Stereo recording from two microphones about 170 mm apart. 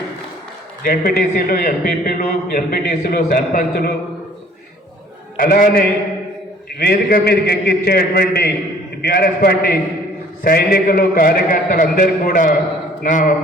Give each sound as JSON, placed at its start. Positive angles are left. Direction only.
{"t": 0.8, "sound": "a man's voice", "side_deg": 60}
{"t": 5.4, "sound": "a man's voice", "side_deg": 55}
{"t": 6.7, "sound": "a man's voice", "side_deg": 65}